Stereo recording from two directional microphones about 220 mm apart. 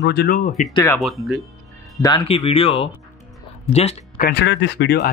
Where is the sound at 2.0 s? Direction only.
20° left (ahead or behind).